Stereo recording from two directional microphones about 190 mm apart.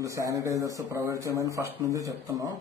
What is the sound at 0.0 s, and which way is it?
Speech, 15° right (ahead or behind).